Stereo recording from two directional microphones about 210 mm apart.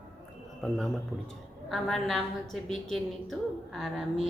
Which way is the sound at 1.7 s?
Centre (ahead or behind).